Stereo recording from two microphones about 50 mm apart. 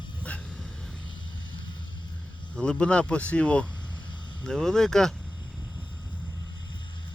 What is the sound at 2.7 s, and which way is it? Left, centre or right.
Speech, left.